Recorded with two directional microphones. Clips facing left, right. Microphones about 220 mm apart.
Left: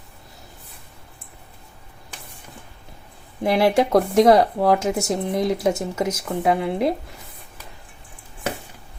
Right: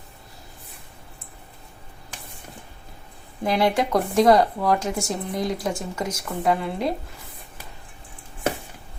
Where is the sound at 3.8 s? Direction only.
25° left (ahead or behind).